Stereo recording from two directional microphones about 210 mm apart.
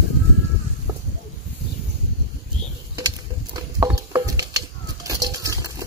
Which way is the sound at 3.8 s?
15° right (ahead or behind).